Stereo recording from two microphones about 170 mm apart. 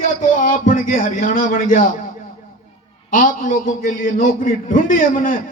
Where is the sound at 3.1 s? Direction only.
55° left (ahead or behind).